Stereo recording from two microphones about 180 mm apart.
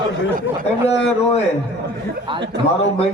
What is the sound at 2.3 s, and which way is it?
Speech, 25° right (ahead or behind).